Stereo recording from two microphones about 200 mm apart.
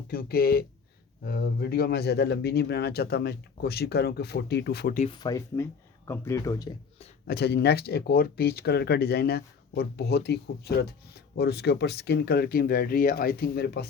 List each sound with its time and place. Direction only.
0.1 s speech: 50° left (ahead or behind)
4.9 s speech: 25° left (ahead or behind)
7.3 s speech: 55° left (ahead or behind)